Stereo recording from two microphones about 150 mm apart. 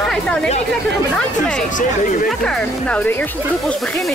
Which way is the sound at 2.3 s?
5° left (ahead or behind).